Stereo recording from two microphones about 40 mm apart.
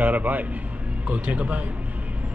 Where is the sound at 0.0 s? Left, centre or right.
Right.